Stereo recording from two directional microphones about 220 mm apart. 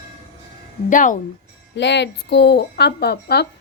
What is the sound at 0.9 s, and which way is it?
Speech, 35° left (ahead or behind).